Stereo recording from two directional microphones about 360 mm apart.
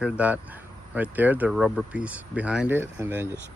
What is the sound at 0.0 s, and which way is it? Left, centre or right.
Speech, centre.